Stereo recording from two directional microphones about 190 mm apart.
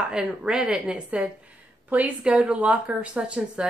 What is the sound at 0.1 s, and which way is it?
A woman's voice, 5° right (ahead or behind).